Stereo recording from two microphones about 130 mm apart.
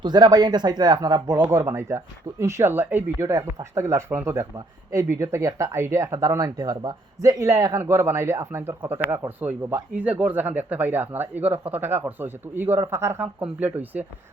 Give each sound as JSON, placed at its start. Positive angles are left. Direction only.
{"t": 0.0, "sound": "speech", "side_deg": -30}
{"t": 1.4, "sound": "speech", "side_deg": -20}